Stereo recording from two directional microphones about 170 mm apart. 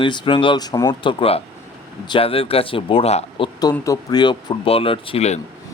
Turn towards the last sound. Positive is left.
turn(degrees=35)  # may be behind; listen again after turning